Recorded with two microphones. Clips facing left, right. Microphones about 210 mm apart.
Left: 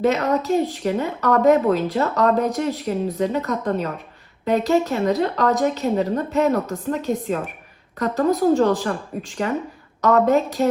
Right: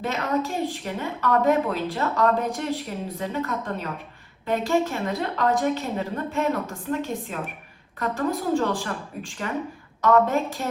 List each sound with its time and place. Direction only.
0.0 s a woman's voice: 45° left (ahead or behind)